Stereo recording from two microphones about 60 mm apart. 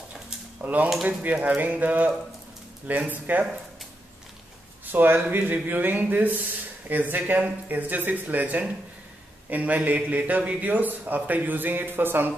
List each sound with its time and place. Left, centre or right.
0.1 s a sound: right
1.0 s a man's voice: right
4.9 s a man's voice: right